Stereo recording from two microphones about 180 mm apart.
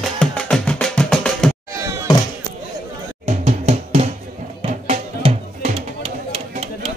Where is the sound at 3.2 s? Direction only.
35° right (ahead or behind).